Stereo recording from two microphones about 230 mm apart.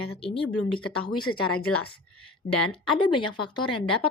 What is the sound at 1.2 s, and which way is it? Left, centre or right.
Speech, left.